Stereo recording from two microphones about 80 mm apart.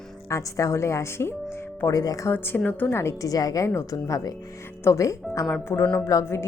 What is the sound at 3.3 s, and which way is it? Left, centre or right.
Speech, left.